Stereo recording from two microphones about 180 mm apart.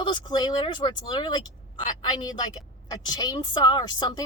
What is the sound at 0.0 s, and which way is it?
Speech, 25° left (ahead or behind).